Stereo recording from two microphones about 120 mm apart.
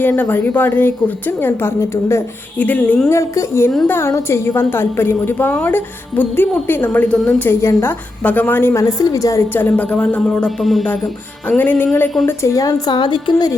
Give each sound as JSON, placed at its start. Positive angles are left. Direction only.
{"t": 0.0, "sound": "a woman's voice", "side_deg": 15}
{"t": 3.1, "sound": "music", "side_deg": 25}
{"t": 3.8, "sound": "a woman's voice", "side_deg": 20}
{"t": 11.4, "sound": "a woman's voice", "side_deg": 15}